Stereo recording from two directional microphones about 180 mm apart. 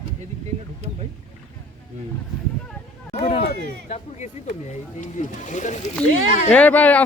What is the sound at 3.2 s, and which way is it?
Speech, 30° left (ahead or behind).